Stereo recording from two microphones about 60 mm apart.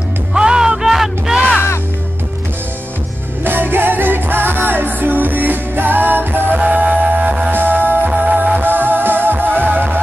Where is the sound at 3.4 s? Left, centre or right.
Right.